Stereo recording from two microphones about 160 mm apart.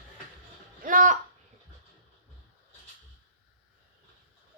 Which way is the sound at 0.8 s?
55° right (ahead or behind).